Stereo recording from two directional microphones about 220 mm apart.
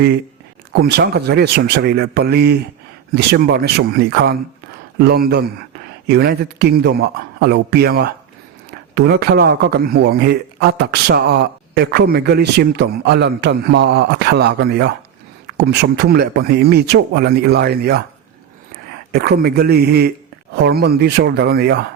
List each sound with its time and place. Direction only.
0.7 s a man's voice: 50° right (ahead or behind)
19.1 s a man's voice: 45° right (ahead or behind)